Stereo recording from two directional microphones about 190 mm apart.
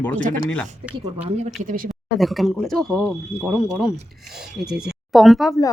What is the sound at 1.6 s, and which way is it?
Speech, 45° right (ahead or behind).